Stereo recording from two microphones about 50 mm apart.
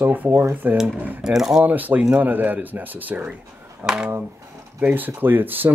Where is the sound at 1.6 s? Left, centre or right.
Right.